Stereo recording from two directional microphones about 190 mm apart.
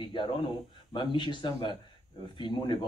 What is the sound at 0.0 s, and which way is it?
Speech, 25° left (ahead or behind).